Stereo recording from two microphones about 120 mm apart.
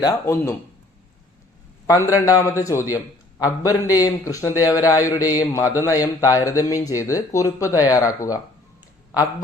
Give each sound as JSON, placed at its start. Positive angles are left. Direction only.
{"t": 0.0, "sound": "a man's voice", "side_deg": 25}
{"t": 1.9, "sound": "a man's voice", "side_deg": 30}